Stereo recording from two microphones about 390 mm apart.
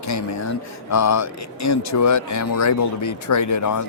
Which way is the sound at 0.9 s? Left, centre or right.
Left.